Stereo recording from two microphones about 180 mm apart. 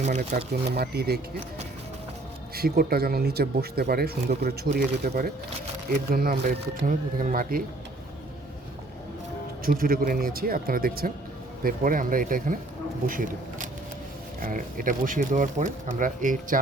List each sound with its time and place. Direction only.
0.3 s speech: 55° right (ahead or behind)
2.6 s speech: 60° right (ahead or behind)
9.6 s speech: 55° right (ahead or behind)